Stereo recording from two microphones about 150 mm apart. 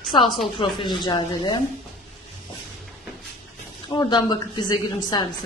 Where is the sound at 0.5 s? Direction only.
30° left (ahead or behind).